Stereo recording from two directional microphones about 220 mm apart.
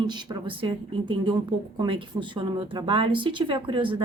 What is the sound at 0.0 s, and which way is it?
Speech, 20° right (ahead or behind).